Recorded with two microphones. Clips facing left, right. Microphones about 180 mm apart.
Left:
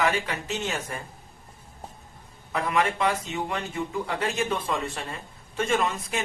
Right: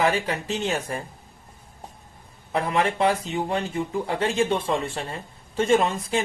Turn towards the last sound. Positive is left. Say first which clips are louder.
# right 5 dB
turn(degrees=-30)  # may be behind; listen again after turning